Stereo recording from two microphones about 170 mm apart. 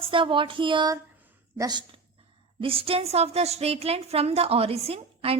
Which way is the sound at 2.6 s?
35° right (ahead or behind).